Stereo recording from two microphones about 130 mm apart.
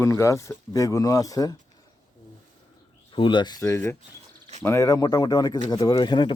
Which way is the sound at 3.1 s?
40° left (ahead or behind).